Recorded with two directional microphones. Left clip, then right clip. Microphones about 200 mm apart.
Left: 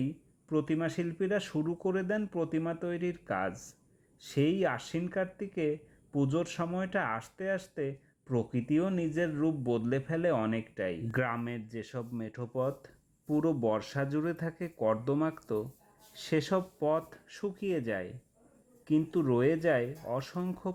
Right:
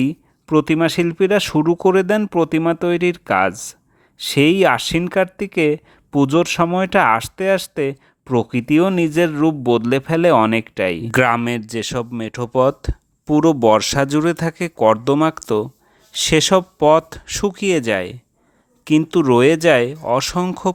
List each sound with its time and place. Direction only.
0.0 s speech: 45° right (ahead or behind)